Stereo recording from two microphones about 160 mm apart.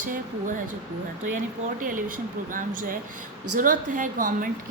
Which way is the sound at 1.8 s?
60° right (ahead or behind).